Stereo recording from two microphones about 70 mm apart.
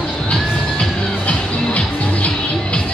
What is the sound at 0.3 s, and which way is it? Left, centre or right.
Music, centre.